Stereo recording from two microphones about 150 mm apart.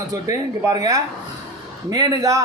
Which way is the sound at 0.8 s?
25° right (ahead or behind).